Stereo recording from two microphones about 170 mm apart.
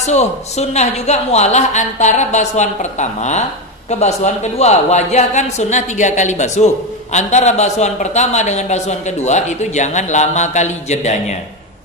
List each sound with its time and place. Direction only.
0.0 s speech: 40° left (ahead or behind)